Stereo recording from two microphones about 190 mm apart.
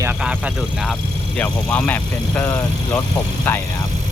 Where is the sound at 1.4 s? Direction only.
5° left (ahead or behind).